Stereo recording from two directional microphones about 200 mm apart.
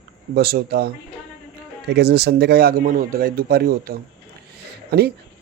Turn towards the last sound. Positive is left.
turn(degrees=-55)  # may be behind; listen again after turning